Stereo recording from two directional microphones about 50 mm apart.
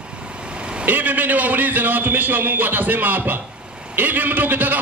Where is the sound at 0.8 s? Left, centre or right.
Right.